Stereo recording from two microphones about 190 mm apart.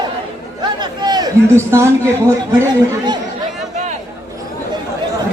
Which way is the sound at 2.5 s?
15° right (ahead or behind).